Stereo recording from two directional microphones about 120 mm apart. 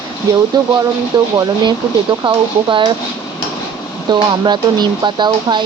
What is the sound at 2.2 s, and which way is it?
Speech, 45° right (ahead or behind).